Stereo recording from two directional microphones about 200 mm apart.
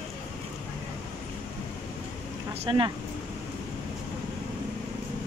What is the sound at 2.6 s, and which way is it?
Speech, 25° right (ahead or behind).